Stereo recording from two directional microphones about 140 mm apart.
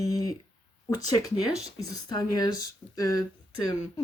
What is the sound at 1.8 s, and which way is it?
Speech, 25° left (ahead or behind).